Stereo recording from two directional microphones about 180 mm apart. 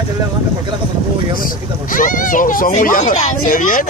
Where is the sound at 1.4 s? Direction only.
50° left (ahead or behind).